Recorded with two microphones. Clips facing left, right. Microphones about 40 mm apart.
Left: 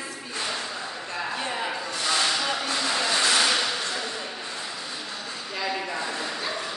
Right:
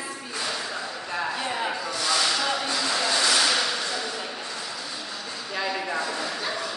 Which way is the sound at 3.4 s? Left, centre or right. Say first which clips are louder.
Even; centre.